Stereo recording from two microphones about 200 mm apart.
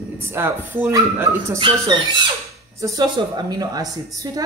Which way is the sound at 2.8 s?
20° right (ahead or behind).